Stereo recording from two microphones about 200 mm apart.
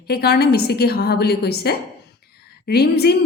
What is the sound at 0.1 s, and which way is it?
A woman's voice, 50° left (ahead or behind).